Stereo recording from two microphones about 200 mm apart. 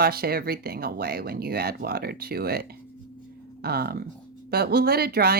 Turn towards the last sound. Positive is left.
turn(degrees=-50)  # may be behind; listen again after turning